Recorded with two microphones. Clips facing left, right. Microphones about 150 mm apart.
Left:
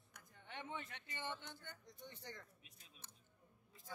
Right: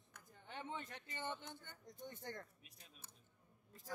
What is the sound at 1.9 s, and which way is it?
Speech, 45° right (ahead or behind).